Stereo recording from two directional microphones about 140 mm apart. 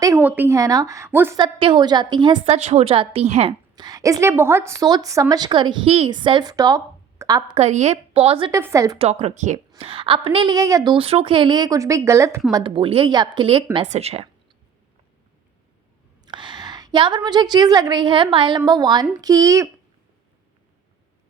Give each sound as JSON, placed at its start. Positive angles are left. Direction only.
{"t": 0.2, "sound": "a woman's voice", "side_deg": -15}
{"t": 1.4, "sound": "speech", "side_deg": -35}
{"t": 2.4, "sound": "a woman's voice", "side_deg": -50}
{"t": 3.8, "sound": "a woman's voice", "side_deg": -25}
{"t": 7.5, "sound": "a woman's voice", "side_deg": -55}
{"t": 8.5, "sound": "a woman's voice", "side_deg": -20}
{"t": 9.0, "sound": "a woman's voice", "side_deg": -50}
{"t": 10.6, "sound": "a woman's voice", "side_deg": -25}
{"t": 10.9, "sound": "a woman's voice", "side_deg": -45}
{"t": 12.7, "sound": "speech", "side_deg": -40}
{"t": 13.8, "sound": "a woman's voice", "side_deg": -50}
{"t": 16.2, "sound": "a woman's voice", "side_deg": -35}